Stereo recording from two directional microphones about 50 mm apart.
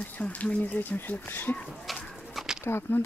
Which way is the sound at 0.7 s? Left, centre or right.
Left.